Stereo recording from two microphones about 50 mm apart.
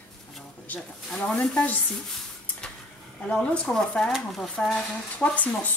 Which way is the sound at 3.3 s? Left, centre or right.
Left.